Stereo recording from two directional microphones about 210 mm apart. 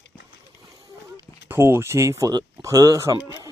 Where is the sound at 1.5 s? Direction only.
10° right (ahead or behind).